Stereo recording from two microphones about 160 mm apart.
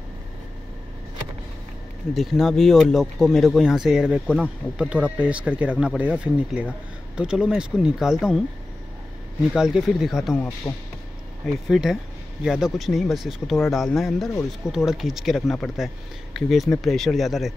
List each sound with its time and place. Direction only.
2.1 s speech: centre (ahead or behind)
9.6 s speech: 5° right (ahead or behind)
11.7 s speech: centre (ahead or behind)